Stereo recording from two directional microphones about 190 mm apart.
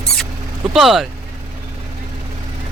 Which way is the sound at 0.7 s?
Centre (ahead or behind).